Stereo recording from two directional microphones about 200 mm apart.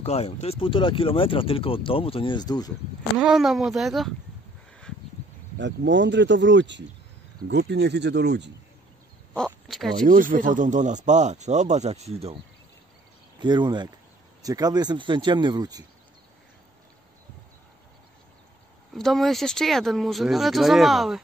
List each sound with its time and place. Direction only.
0.0 s speech: 30° left (ahead or behind)
3.2 s speech: centre (ahead or behind)
5.6 s speech: 65° right (ahead or behind)
9.3 s speech: centre (ahead or behind)
10.0 s speech: 40° right (ahead or behind)
13.4 s speech: 20° right (ahead or behind)
18.9 s speech: centre (ahead or behind)